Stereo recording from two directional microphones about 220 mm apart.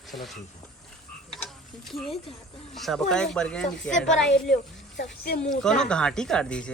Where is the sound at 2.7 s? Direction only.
Centre (ahead or behind).